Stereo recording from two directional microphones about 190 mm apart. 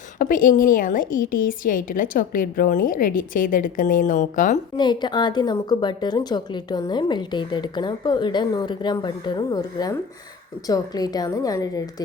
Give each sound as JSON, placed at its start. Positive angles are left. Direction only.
{"t": 0.2, "sound": "a woman's voice", "side_deg": 45}
{"t": 4.8, "sound": "a woman's voice", "side_deg": 25}